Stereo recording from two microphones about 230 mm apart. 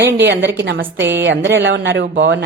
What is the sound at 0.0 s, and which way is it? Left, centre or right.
Speech, right.